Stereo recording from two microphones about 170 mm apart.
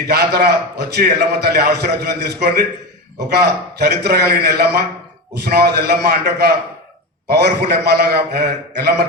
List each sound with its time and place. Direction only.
0.1 s a man's voice: 70° right (ahead or behind)